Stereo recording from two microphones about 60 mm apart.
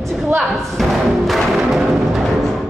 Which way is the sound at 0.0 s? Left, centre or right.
Centre.